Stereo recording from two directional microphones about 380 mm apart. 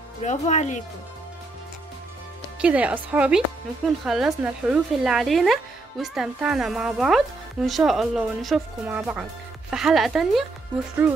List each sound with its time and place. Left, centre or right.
0.2 s speech: centre
2.6 s a woman's voice: centre